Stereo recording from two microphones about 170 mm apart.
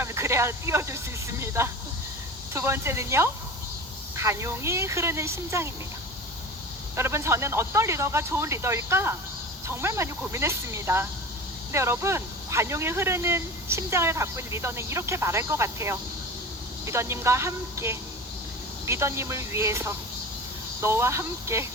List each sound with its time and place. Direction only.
0.0 s speech: 15° right (ahead or behind)
6.9 s speech: 15° right (ahead or behind)